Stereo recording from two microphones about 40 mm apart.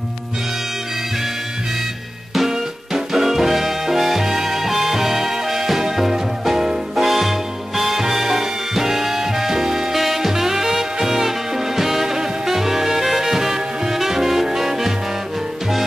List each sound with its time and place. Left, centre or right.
2.3 s music: centre